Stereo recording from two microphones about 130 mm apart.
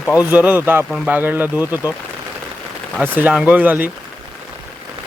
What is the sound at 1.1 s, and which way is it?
Speech, 15° right (ahead or behind).